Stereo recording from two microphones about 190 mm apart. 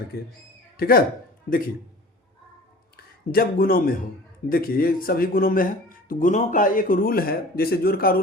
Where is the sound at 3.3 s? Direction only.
50° left (ahead or behind).